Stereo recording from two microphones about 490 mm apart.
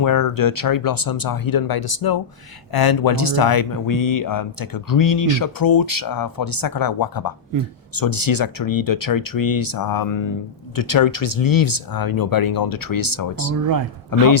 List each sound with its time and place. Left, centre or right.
0.0 s speech: left